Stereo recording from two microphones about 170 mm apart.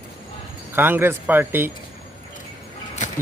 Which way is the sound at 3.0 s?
45° left (ahead or behind).